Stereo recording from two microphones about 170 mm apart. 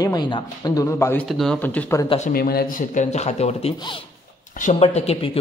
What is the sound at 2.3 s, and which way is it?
Speech, 60° left (ahead or behind).